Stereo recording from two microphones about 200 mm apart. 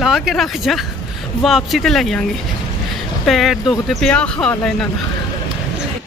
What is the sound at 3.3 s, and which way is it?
Speech, centre (ahead or behind).